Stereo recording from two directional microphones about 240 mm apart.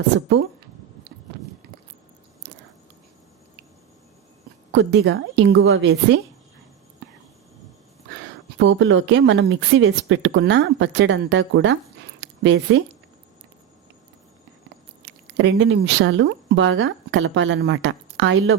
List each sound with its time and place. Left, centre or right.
0.1 s speech: right
4.7 s speech: right
8.5 s speech: right
15.0 s speech: right